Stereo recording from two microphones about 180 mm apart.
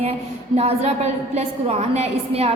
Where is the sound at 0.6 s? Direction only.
35° right (ahead or behind).